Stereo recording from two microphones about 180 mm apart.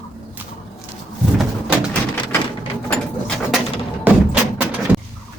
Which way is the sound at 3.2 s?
Centre (ahead or behind).